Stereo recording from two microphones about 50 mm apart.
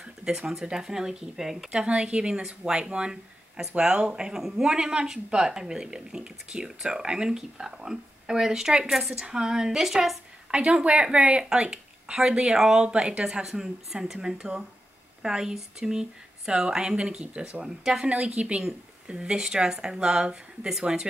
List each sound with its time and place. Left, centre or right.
0.0 s speech: centre
1.7 s speech: right
10.5 s speech: right
18.0 s speech: right